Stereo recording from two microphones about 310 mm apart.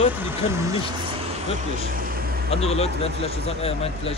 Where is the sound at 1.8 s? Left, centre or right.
Right.